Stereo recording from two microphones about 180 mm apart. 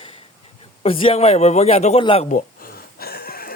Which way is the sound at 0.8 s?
30° left (ahead or behind).